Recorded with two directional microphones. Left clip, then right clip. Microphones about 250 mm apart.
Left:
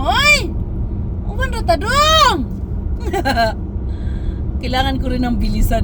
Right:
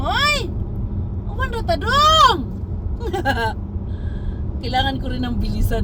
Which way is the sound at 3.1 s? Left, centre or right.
Left.